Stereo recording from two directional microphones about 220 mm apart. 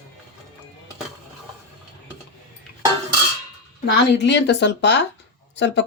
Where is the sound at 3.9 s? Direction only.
50° left (ahead or behind).